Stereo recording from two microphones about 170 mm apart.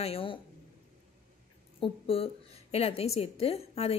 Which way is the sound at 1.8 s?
35° left (ahead or behind).